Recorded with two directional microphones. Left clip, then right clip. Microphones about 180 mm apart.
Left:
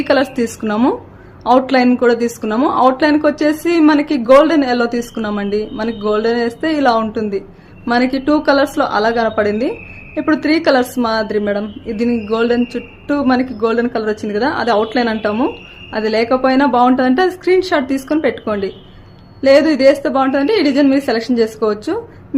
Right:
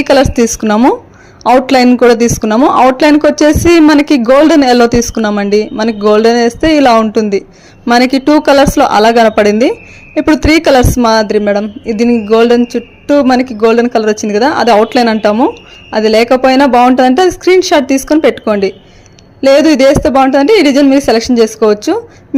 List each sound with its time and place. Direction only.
0.0 s a woman's voice: 35° right (ahead or behind)